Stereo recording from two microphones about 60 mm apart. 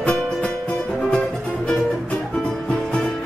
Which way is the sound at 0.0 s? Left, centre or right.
Centre.